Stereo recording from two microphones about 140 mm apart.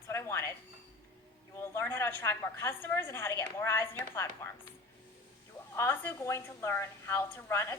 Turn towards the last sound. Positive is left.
turn(degrees=15)  # may be behind; listen again after turning